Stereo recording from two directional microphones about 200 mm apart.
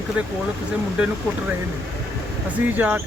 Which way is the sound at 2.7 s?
10° right (ahead or behind).